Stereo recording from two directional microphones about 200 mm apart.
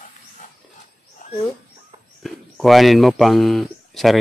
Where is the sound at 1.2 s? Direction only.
40° left (ahead or behind).